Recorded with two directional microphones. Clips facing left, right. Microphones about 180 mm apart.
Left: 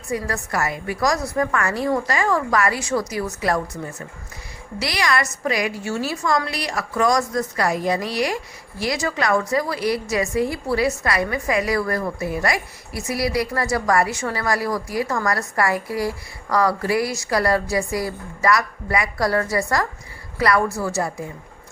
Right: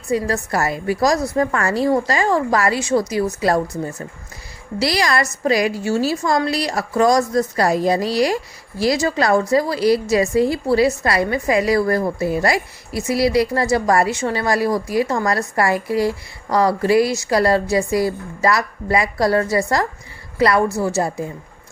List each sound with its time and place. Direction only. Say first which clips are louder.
0.1 s a woman's voice: right 5 dB; 30° right (ahead or behind)